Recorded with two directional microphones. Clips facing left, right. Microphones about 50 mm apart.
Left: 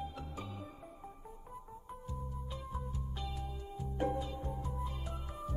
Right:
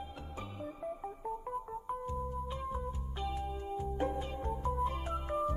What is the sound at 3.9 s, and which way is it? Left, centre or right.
Organ, right.